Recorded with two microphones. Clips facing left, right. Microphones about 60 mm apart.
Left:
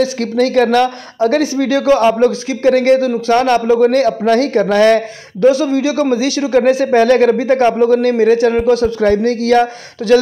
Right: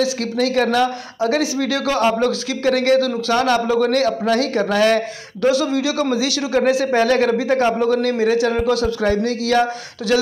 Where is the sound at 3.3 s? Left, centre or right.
Left.